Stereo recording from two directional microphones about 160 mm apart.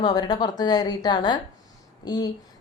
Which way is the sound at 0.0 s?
25° left (ahead or behind).